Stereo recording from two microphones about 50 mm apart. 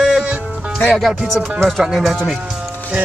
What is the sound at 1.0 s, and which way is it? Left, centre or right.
Speech, centre.